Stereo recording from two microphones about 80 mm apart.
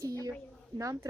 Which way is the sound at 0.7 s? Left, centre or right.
Right.